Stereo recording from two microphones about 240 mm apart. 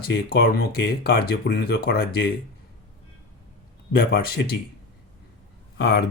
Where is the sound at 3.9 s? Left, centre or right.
Left.